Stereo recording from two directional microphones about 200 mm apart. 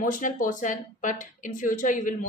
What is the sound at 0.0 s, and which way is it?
Speech, 40° left (ahead or behind).